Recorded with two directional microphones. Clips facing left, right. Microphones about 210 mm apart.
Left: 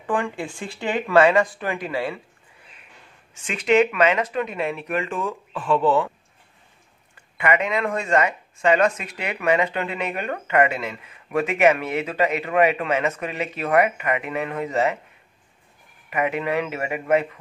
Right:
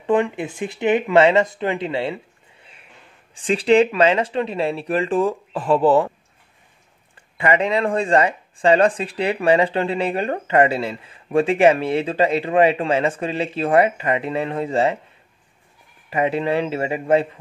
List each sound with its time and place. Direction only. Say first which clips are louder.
0.0 s speech: right 6 dB; 20° right (ahead or behind)
3.3 s speech: right 4 dB; 30° right (ahead or behind)
7.3 s speech: right 3 dB; 30° right (ahead or behind)
16.1 s speech: right 4 dB; 30° right (ahead or behind)